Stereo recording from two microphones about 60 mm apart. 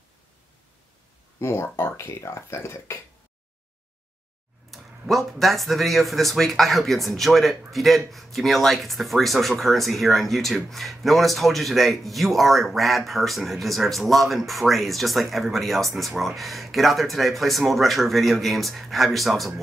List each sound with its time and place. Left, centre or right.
1.4 s speech: left
4.6 s speech: centre